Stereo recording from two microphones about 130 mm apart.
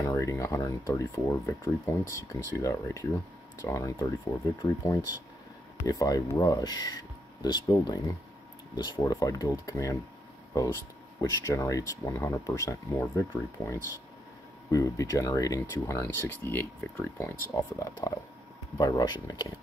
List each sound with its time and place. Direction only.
0.0 s speech: 25° left (ahead or behind)
11.1 s speech: 25° left (ahead or behind)
14.7 s speech: 25° left (ahead or behind)